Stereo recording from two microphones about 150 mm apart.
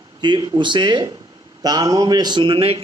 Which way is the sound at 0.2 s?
30° right (ahead or behind).